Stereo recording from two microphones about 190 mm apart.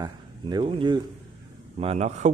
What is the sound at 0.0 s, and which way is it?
Speech, 25° right (ahead or behind).